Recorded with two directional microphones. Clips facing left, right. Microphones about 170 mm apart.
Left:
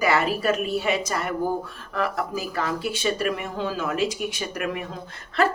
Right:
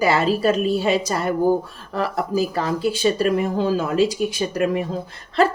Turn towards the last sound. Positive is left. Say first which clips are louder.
# right 5 dB
turn(degrees=-30)  # may be behind; listen again after turning